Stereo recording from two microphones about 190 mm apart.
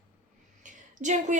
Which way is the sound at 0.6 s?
40° right (ahead or behind).